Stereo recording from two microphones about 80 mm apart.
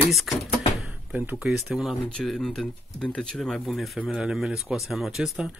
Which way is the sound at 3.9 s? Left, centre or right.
Centre.